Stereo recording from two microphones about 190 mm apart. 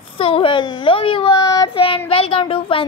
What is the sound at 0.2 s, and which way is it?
A woman's voice, 30° left (ahead or behind).